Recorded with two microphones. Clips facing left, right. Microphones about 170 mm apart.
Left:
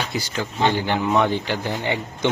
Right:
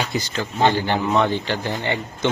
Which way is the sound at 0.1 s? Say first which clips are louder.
Right 1 dB; 10° left (ahead or behind).